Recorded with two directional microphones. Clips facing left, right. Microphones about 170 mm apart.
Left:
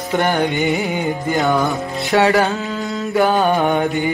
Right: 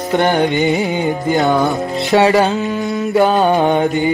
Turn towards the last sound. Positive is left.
turn(degrees=-20)  # may be behind; listen again after turning